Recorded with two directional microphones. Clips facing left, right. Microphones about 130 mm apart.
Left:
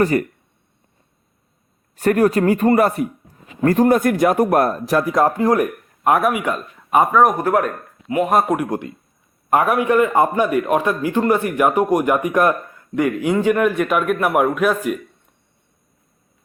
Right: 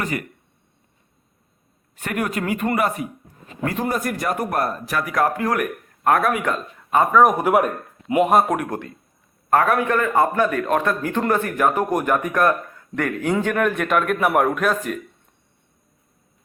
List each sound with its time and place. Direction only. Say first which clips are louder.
0.0 s speech: left 10 dB; 40° left (ahead or behind)
2.0 s a man's voice: left 10 dB; 35° left (ahead or behind)
4.9 s speech: left 5 dB; 35° left (ahead or behind)
6.1 s a man's voice: left 2 dB; 15° left (ahead or behind)
7.5 s speech: even; 15° right (ahead or behind)
8.2 s a man's voice: even; centre (ahead or behind)
9.5 s a man's voice: left 2 dB; 15° left (ahead or behind)